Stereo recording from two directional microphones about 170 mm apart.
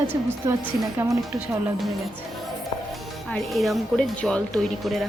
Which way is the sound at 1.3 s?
Centre (ahead or behind).